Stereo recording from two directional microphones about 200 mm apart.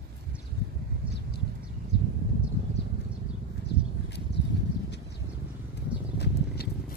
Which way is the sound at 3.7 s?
60° left (ahead or behind).